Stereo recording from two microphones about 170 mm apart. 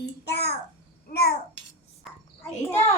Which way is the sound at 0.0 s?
75° left (ahead or behind).